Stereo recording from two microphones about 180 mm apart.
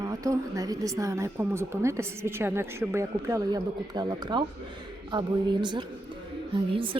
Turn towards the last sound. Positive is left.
turn(degrees=-30)  # may be behind; listen again after turning